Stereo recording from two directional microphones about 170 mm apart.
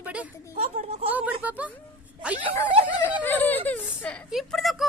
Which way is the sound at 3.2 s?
10° left (ahead or behind).